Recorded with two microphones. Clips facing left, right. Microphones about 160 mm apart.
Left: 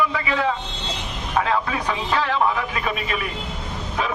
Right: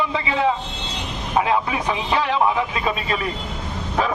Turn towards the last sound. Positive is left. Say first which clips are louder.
# right 2 dB
turn(degrees=-25)  # may be behind; listen again after turning